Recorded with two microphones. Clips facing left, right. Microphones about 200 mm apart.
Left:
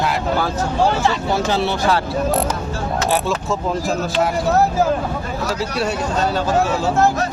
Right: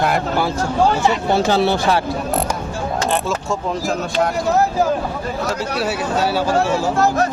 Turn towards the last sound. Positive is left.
turn(degrees=-10)  # may be behind; listen again after turning